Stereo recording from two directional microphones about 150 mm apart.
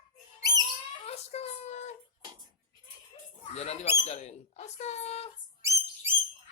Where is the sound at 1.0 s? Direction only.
45° left (ahead or behind).